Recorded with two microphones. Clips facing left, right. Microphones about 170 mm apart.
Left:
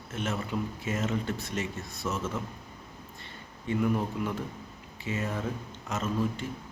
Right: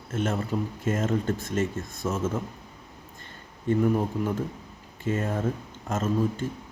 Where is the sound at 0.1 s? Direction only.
45° right (ahead or behind).